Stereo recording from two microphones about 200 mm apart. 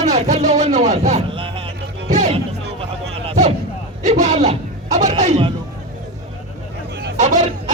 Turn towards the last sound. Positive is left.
turn(degrees=-35)  # may be behind; listen again after turning